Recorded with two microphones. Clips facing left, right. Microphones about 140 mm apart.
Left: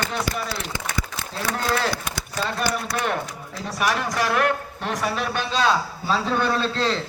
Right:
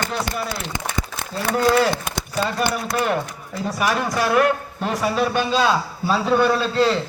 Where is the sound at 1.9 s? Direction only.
25° right (ahead or behind).